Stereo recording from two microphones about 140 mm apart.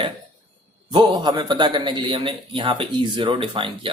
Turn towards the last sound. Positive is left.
turn(degrees=-35)  # may be behind; listen again after turning